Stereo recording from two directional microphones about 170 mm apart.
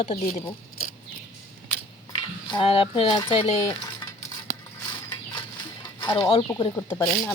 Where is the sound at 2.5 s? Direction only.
30° left (ahead or behind).